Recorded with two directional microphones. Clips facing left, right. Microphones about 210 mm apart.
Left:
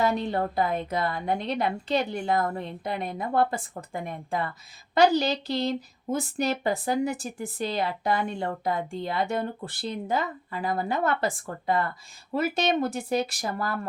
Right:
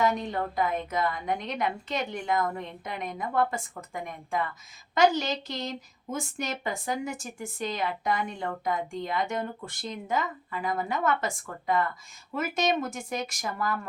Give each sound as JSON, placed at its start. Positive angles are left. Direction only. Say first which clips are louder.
{"t": 0.0, "sound": "a woman's voice", "louder": "left 2 dB", "side_deg": 35}